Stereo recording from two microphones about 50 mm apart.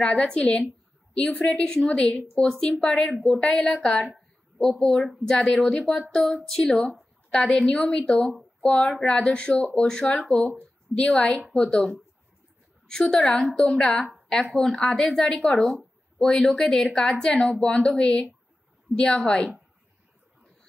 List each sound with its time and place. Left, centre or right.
0.0 s a woman's voice: centre
1.4 s a woman's voice: centre
8.5 s speech: left
9.0 s a woman's voice: centre
12.8 s speech: centre
13.3 s a woman's voice: centre
13.6 s speech: centre
14.4 s a woman's voice: centre
14.8 s a woman's voice: centre